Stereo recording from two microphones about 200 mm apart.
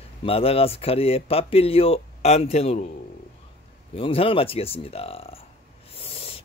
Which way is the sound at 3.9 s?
25° left (ahead or behind).